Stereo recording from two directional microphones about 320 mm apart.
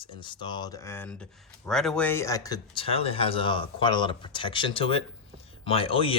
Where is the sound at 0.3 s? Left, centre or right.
Centre.